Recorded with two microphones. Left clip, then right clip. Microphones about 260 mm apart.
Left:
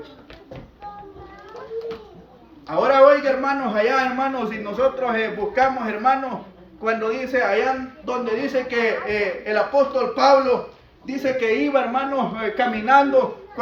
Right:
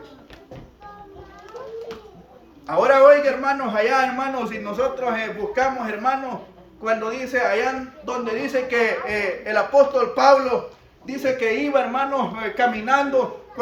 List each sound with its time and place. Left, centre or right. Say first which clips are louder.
2.6 s a man's voice: right 1 dB; centre